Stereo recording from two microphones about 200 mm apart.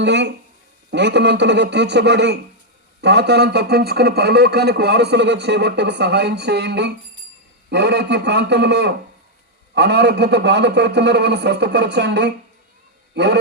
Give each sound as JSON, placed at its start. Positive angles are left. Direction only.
{"t": 0.0, "sound": "speech", "side_deg": -60}